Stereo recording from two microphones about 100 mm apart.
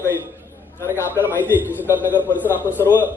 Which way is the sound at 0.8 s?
30° left (ahead or behind).